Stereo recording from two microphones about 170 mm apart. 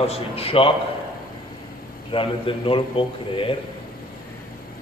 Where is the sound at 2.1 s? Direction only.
30° left (ahead or behind).